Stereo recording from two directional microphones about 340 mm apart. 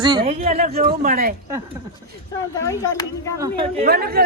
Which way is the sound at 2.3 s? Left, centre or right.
Centre.